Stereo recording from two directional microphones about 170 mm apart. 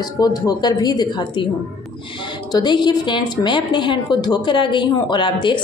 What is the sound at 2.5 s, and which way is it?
A woman's voice, 25° left (ahead or behind).